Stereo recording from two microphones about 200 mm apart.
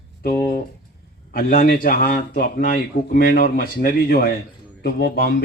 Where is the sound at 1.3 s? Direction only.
45° left (ahead or behind).